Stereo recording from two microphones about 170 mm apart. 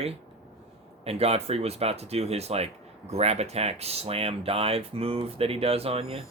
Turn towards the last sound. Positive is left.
turn(degrees=-35)  # may be behind; listen again after turning